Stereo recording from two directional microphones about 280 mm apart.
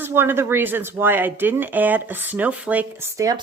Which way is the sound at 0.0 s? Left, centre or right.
Centre.